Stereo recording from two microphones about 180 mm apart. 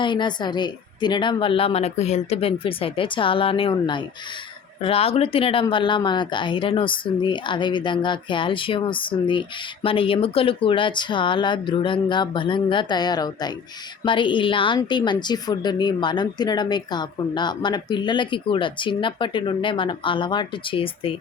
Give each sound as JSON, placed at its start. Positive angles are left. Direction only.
{"t": 0.0, "sound": "a woman's voice", "side_deg": 25}